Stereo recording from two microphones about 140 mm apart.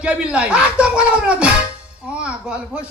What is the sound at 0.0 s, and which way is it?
Speech, 10° right (ahead or behind).